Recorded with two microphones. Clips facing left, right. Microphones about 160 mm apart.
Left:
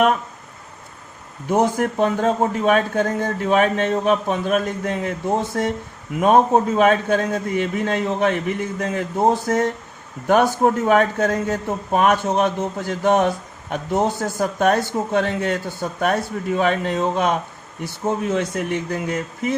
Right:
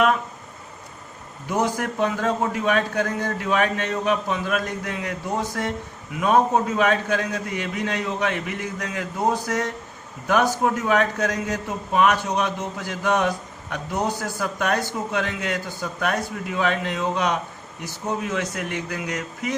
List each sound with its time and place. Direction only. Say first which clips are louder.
1.5 s a man's voice: left 5 dB; 50° left (ahead or behind)
6.1 s a man's voice: left 4 dB; 45° left (ahead or behind)